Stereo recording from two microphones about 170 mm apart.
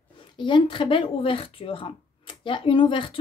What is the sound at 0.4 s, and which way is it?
A woman's voice, 30° left (ahead or behind).